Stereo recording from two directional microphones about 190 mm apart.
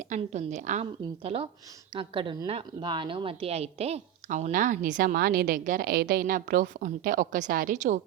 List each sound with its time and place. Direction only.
0.1 s a woman's voice: 35° right (ahead or behind)